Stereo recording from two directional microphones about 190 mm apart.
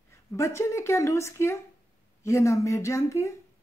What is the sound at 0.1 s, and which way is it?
Speech, 15° left (ahead or behind).